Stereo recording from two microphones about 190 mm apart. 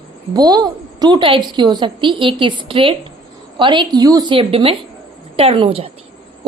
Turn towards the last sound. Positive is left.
turn(degrees=-30)  # may be behind; listen again after turning